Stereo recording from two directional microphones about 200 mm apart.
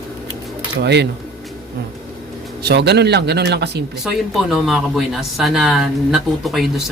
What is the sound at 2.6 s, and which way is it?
Speech, 55° right (ahead or behind).